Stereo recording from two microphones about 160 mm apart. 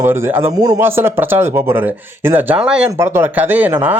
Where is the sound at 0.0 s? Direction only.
15° right (ahead or behind).